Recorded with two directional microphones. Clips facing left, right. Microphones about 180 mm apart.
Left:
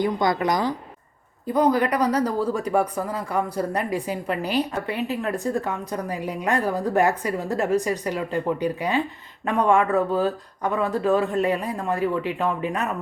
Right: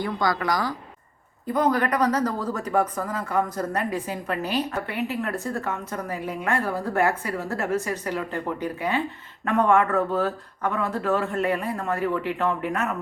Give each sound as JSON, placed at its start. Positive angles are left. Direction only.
{"t": 0.0, "sound": "a woman's voice", "side_deg": 20}